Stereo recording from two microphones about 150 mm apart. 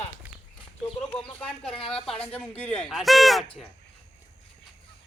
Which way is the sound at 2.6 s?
10° left (ahead or behind).